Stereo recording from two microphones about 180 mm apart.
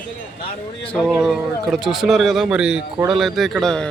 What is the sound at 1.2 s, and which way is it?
A man's voice, centre (ahead or behind).